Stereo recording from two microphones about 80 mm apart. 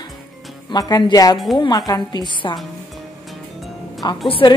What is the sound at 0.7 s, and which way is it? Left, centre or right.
A woman's voice, left.